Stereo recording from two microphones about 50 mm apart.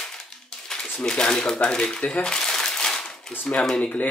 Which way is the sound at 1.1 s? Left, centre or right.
Centre.